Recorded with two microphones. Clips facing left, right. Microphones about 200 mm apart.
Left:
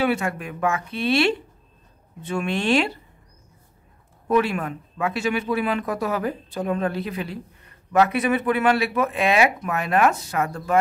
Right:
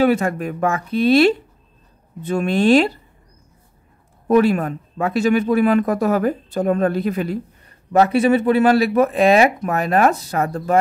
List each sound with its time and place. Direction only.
0.0 s speech: 40° right (ahead or behind)
4.3 s speech: 40° right (ahead or behind)
7.9 s speech: 30° right (ahead or behind)